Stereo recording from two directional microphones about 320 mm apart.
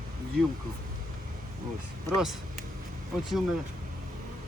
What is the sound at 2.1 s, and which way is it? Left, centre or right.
Speech, centre.